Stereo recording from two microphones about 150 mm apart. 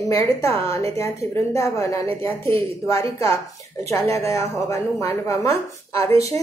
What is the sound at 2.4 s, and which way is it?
Speech, 40° right (ahead or behind).